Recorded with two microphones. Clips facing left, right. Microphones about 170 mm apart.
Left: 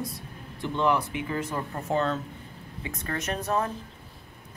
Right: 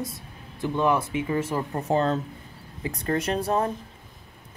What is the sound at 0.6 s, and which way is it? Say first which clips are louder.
Speech: right 2 dB; 20° right (ahead or behind).